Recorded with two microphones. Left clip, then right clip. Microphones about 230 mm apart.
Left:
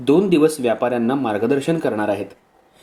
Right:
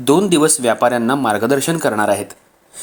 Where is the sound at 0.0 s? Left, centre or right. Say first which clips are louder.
Right 2 dB; right.